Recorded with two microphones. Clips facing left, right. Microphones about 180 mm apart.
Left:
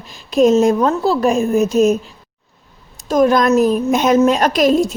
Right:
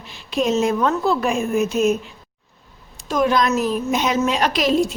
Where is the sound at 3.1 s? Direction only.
45° left (ahead or behind).